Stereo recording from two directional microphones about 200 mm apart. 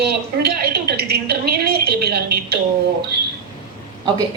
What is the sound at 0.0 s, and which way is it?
A woman's voice, 55° right (ahead or behind).